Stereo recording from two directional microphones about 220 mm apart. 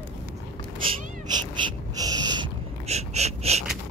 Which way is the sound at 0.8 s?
20° right (ahead or behind).